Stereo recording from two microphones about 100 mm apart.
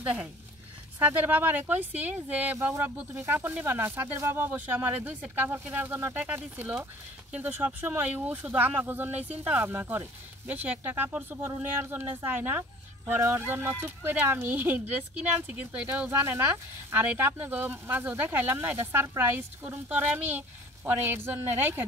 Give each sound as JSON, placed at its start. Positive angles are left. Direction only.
{"t": 0.0, "sound": "speech", "side_deg": -20}